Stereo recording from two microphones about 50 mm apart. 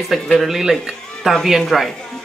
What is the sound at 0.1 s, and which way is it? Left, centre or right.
Speech, centre.